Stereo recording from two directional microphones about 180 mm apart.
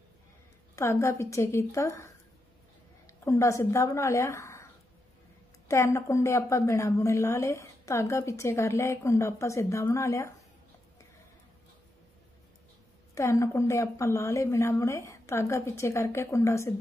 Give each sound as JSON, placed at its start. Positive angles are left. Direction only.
{"t": 0.7, "sound": "a woman's voice", "side_deg": 15}
{"t": 3.3, "sound": "a woman's voice", "side_deg": 15}
{"t": 5.7, "sound": "a woman's voice", "side_deg": 15}
{"t": 13.1, "sound": "a woman's voice", "side_deg": 15}